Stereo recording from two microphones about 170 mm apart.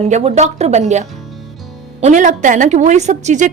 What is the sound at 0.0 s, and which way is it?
A woman's voice, 40° right (ahead or behind).